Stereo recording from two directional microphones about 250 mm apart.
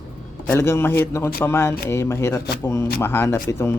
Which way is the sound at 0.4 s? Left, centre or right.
Centre.